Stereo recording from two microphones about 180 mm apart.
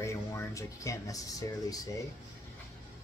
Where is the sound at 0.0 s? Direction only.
15° left (ahead or behind).